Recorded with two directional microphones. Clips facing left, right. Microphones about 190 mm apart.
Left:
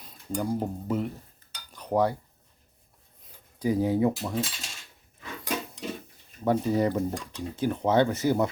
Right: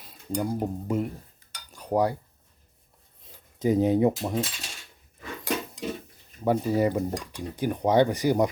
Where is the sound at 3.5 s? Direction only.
20° right (ahead or behind).